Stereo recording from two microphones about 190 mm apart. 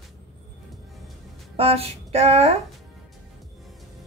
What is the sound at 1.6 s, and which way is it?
A woman's voice, 30° right (ahead or behind).